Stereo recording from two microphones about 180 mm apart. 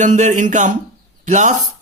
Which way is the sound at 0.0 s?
40° right (ahead or behind).